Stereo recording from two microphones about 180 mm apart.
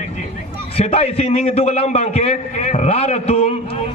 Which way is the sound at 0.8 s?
35° left (ahead or behind).